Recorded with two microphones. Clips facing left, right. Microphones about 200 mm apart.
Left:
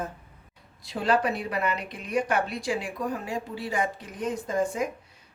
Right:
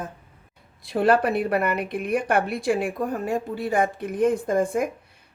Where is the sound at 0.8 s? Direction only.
55° right (ahead or behind).